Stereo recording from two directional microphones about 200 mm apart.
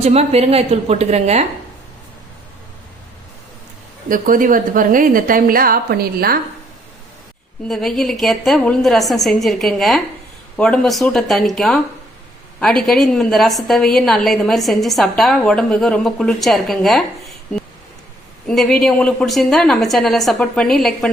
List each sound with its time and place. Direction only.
0.0 s a woman's voice: 30° right (ahead or behind)
4.1 s a woman's voice: 45° right (ahead or behind)
7.7 s a woman's voice: centre (ahead or behind)